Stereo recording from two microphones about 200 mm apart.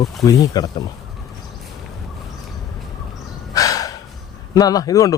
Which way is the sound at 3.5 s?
15° left (ahead or behind).